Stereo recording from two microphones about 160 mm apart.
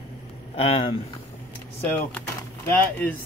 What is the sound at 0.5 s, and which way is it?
Speech, 40° left (ahead or behind).